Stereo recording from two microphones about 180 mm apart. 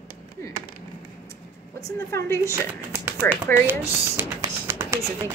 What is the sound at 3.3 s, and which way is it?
Speech, 10° right (ahead or behind).